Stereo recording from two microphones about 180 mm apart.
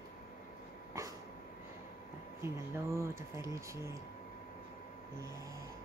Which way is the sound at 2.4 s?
15° right (ahead or behind).